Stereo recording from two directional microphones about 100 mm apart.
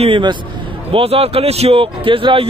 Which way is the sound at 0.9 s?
70° right (ahead or behind).